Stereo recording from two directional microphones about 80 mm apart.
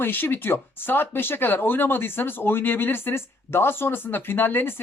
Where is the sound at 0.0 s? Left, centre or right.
Left.